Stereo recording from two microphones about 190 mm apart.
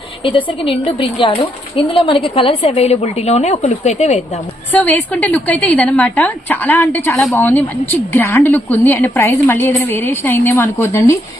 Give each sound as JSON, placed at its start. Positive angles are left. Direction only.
{"t": 0.2, "sound": "a woman's voice", "side_deg": 25}
{"t": 4.7, "sound": "a woman's voice", "side_deg": 10}